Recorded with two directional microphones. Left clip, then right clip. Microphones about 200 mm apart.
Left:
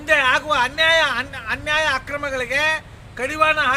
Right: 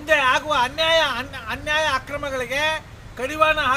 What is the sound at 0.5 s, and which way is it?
A man's voice, centre (ahead or behind).